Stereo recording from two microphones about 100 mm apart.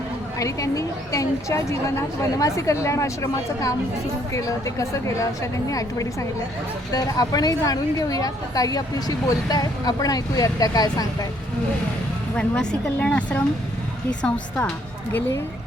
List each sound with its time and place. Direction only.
0.3 s a woman's voice: 35° left (ahead or behind)
12.4 s speech: 10° left (ahead or behind)